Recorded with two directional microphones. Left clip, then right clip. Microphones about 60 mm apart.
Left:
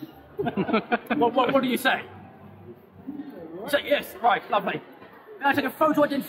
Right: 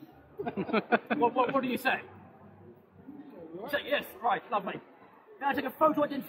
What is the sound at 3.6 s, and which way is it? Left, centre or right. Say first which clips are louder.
A man's voice: left 7 dB; centre.